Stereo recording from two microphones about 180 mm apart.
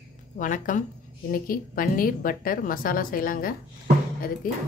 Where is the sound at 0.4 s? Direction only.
45° left (ahead or behind).